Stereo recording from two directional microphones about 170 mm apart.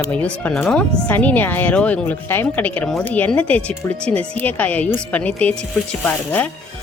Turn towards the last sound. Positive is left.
turn(degrees=10)  # may be behind; listen again after turning